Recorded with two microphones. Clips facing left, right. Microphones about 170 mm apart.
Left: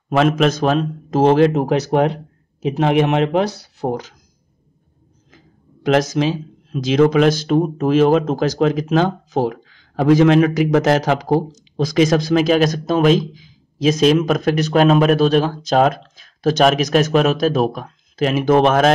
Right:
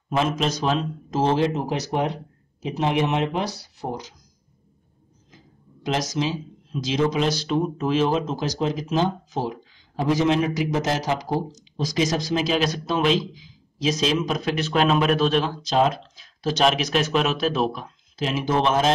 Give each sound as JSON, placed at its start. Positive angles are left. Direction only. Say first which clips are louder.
{"t": 0.1, "sound": "a man's voice", "louder": "left 8 dB", "side_deg": 65}
{"t": 5.9, "sound": "speech", "louder": "left 8 dB", "side_deg": 60}